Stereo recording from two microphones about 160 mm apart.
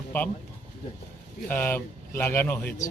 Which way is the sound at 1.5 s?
15° left (ahead or behind).